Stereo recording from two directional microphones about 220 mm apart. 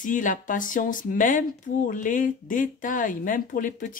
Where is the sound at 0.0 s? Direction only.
35° left (ahead or behind).